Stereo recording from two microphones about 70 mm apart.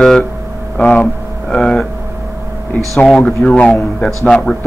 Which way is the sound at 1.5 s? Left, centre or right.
Centre.